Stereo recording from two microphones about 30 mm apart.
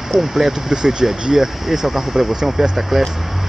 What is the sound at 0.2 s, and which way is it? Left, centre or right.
Speech, centre.